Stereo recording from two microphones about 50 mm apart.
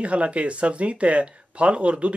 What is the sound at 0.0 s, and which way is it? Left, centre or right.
Speech, right.